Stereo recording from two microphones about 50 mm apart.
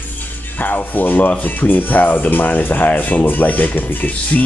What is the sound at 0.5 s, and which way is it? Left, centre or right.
Speech, left.